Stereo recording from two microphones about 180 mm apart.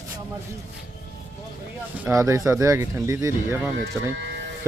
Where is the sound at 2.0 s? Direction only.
15° right (ahead or behind).